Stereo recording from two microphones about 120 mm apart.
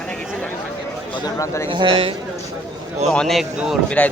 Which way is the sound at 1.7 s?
45° right (ahead or behind).